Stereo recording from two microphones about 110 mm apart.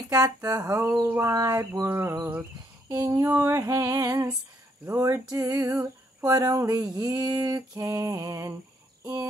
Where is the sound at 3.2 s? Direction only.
20° right (ahead or behind).